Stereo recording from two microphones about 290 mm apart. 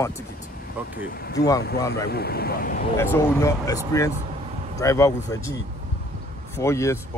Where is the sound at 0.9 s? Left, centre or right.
Left.